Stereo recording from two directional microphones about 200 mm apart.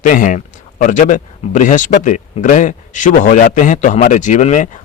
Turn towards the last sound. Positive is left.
turn(degrees=35)  # may be behind; listen again after turning